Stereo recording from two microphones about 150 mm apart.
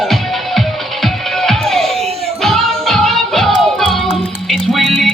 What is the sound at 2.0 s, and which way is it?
Music, 45° right (ahead or behind).